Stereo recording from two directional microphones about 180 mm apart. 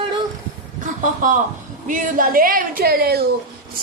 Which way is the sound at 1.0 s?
45° right (ahead or behind).